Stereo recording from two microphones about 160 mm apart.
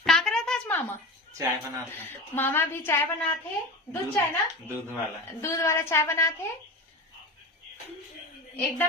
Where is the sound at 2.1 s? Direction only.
15° left (ahead or behind).